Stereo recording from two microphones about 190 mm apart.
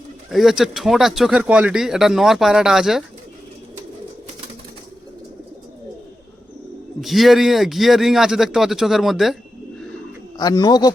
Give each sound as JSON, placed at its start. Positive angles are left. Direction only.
{"t": 0.3, "sound": "speech", "side_deg": 0}
{"t": 7.0, "sound": "speech", "side_deg": 0}
{"t": 10.3, "sound": "speech", "side_deg": 20}